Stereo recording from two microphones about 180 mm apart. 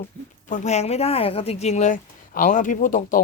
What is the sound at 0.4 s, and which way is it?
A woman's voice, 45° left (ahead or behind).